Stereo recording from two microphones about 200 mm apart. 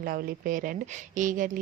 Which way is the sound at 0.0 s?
45° right (ahead or behind).